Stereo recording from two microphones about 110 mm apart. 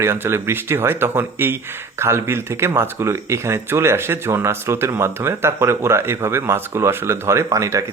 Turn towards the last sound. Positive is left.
turn(degrees=-30)  # may be behind; listen again after turning